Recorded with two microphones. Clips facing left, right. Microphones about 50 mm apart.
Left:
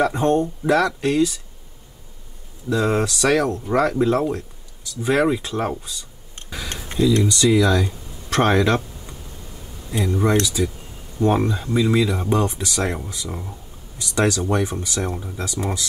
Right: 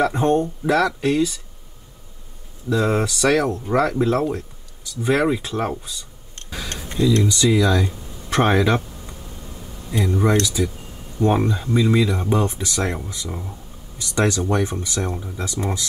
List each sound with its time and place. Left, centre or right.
0.0 s speech: centre
2.7 s speech: centre
7.2 s speech: centre